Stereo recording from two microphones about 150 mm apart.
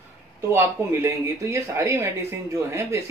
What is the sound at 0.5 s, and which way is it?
Speech, 20° right (ahead or behind).